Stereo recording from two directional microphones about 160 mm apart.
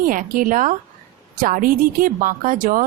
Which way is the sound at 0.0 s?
60° right (ahead or behind).